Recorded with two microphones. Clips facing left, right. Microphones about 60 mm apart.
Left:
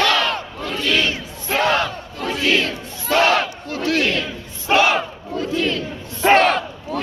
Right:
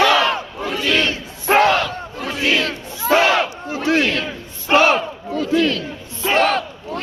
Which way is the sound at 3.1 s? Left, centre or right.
Centre.